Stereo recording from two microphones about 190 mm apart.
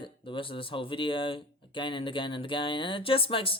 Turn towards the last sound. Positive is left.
turn(degrees=30)  # may be behind; listen again after turning